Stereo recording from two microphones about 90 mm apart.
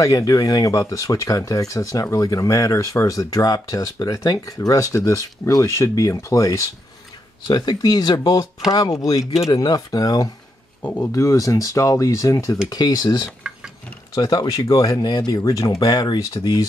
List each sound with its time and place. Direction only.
0.0 s speech: 40° left (ahead or behind)
7.4 s speech: 50° left (ahead or behind)
9.2 s speech: 5° right (ahead or behind)
9.5 s speech: 45° left (ahead or behind)
15.8 s speech: 50° left (ahead or behind)